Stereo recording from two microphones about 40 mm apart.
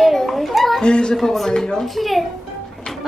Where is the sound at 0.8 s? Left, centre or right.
Left.